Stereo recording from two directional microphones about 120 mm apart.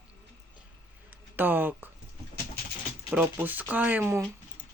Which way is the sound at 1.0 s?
15° right (ahead or behind).